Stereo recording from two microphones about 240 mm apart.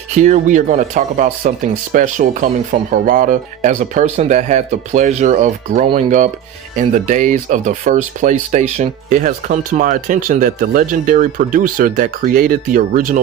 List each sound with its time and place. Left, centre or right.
0.1 s speech: right